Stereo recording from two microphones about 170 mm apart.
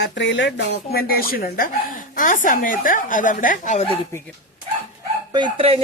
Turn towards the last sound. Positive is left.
turn(degrees=-30)  # may be behind; listen again after turning